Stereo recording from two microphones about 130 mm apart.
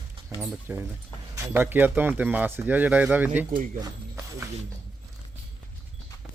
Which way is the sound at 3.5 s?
90° right.